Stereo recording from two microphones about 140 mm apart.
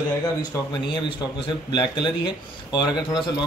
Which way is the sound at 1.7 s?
35° left (ahead or behind).